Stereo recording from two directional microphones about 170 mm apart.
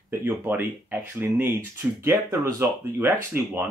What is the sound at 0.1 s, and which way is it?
Speech, 15° right (ahead or behind).